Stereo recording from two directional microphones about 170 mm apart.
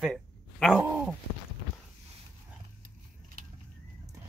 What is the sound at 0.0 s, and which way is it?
Dog, centre (ahead or behind).